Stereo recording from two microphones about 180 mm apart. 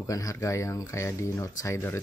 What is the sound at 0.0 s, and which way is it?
Speech, 20° left (ahead or behind).